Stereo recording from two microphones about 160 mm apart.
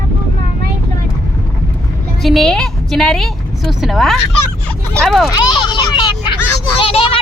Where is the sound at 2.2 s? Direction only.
Centre (ahead or behind).